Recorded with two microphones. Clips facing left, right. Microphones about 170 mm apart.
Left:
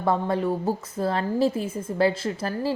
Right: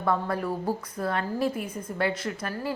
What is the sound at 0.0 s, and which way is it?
A woman's voice, 25° left (ahead or behind).